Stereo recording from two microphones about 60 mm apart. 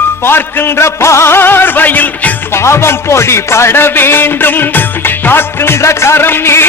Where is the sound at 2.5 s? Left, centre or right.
Left.